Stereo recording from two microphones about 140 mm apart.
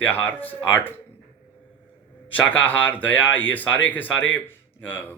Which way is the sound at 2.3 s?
10° left (ahead or behind).